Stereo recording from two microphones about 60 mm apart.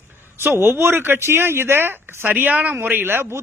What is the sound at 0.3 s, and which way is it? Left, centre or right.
A man's voice, right.